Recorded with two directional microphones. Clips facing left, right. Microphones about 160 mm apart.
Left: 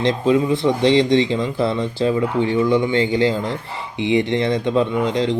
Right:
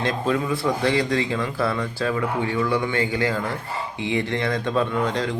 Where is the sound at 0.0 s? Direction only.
20° left (ahead or behind).